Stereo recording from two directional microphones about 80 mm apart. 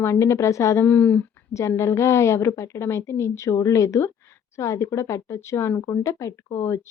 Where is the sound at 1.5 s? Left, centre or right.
Left.